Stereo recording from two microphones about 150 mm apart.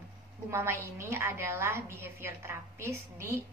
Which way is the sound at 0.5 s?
15° right (ahead or behind).